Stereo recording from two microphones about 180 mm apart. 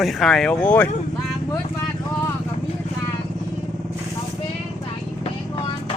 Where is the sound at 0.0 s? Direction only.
Centre (ahead or behind).